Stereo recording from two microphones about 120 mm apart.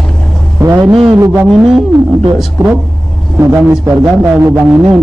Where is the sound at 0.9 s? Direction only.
45° right (ahead or behind).